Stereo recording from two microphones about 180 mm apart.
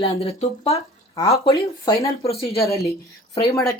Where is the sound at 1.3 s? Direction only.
20° left (ahead or behind).